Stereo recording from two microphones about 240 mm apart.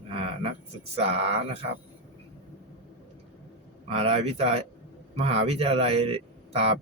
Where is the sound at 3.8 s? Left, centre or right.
Right.